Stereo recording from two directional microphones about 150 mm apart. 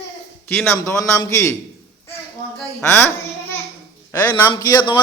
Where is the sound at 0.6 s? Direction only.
15° left (ahead or behind).